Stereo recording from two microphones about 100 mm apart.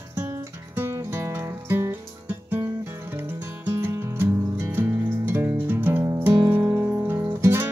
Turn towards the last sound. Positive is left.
turn(degrees=-25)  # may be behind; listen again after turning